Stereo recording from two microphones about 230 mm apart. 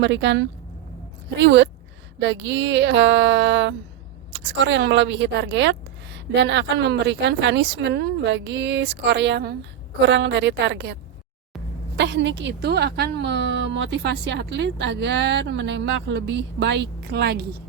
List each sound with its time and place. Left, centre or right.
0.0 s a woman's voice: right
11.9 s a woman's voice: right